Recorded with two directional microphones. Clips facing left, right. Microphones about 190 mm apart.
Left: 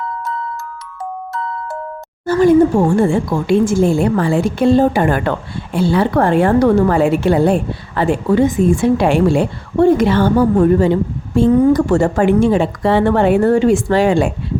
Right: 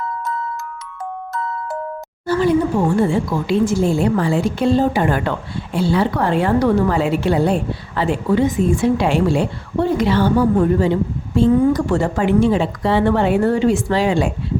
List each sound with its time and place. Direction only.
2.2 s a woman's voice: 45° left (ahead or behind)